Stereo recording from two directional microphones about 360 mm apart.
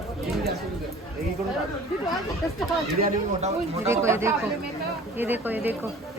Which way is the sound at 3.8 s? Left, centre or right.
Centre.